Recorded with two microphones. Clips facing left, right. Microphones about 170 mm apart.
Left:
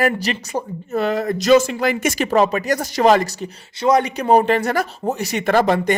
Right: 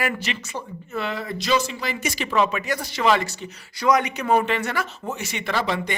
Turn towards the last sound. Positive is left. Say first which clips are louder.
# left 9 dB
turn(degrees=45)  # may be behind; listen again after turning